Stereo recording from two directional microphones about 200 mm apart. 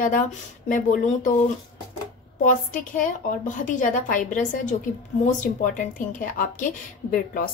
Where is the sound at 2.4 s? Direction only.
40° left (ahead or behind).